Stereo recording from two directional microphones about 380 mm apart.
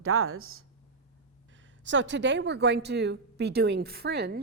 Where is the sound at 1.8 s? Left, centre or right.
Right.